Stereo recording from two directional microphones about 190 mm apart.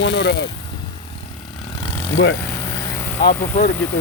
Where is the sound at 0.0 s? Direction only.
65° left (ahead or behind).